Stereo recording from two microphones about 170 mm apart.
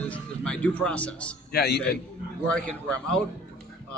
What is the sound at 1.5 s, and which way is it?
Speech, 70° left (ahead or behind).